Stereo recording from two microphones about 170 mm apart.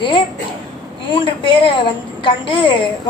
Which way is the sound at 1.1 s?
30° left (ahead or behind).